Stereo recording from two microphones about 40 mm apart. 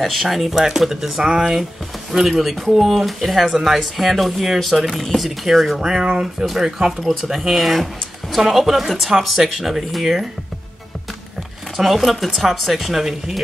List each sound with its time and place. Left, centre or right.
0.0 s speech: centre
1.2 s speech: centre
2.3 s speech: centre
11.7 s speech: centre